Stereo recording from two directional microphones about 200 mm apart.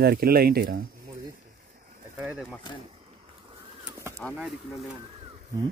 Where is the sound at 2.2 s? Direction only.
5° right (ahead or behind).